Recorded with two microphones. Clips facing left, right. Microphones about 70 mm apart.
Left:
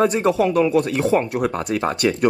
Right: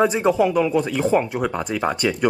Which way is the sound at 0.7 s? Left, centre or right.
Left.